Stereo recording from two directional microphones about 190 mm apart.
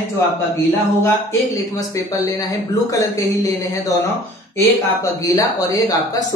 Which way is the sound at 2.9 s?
15° left (ahead or behind).